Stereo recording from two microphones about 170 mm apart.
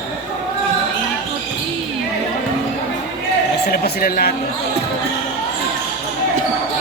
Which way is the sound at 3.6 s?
65° left (ahead or behind).